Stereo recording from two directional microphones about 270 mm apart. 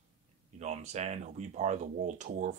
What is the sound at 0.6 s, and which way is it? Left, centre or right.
Speech, right.